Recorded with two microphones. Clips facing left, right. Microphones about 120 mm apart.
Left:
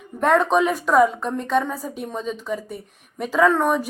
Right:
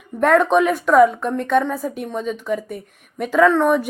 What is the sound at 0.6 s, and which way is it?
Speech, 40° left (ahead or behind).